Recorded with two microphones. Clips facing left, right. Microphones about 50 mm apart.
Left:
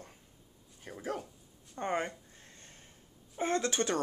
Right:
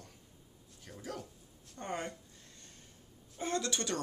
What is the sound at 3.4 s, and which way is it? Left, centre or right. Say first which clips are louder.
Speech: left 4 dB; left.